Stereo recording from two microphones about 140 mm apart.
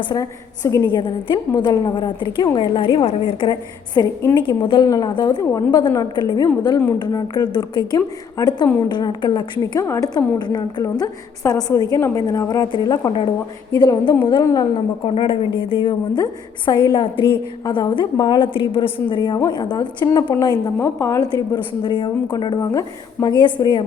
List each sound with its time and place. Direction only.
0.0 s a woman's voice: 25° left (ahead or behind)
9.8 s a woman's voice: 20° left (ahead or behind)
15.0 s a woman's voice: 40° left (ahead or behind)
20.7 s a woman's voice: 20° left (ahead or behind); by 22.5 s 35° left (ahead or behind)
22.5 s a woman's voice: 25° left (ahead or behind)